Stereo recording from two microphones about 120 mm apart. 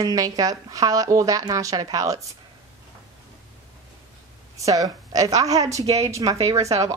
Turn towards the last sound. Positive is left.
turn(degrees=-30)  # may be behind; listen again after turning